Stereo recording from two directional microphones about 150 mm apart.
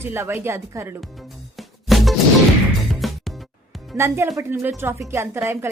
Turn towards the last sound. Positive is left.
turn(degrees=-15)  # may be behind; listen again after turning